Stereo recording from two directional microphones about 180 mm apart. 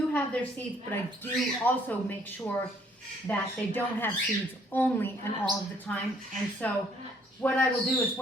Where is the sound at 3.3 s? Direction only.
10° left (ahead or behind).